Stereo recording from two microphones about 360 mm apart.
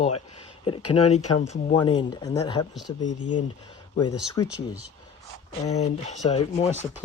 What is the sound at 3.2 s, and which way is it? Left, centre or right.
Speech, left.